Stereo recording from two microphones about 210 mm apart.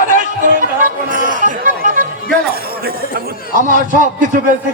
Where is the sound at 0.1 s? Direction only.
40° right (ahead or behind).